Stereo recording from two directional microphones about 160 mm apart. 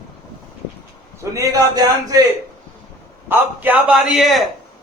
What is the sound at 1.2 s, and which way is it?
A man's voice, 20° right (ahead or behind).